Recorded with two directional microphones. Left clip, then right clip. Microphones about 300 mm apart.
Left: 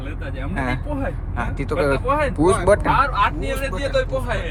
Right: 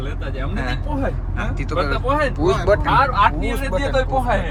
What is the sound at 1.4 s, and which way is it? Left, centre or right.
Speech, centre.